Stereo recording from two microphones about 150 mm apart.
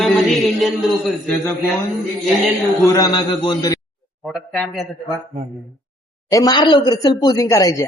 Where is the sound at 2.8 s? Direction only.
25° left (ahead or behind).